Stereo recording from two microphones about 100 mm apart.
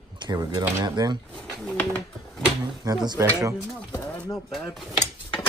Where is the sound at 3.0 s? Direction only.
35° right (ahead or behind).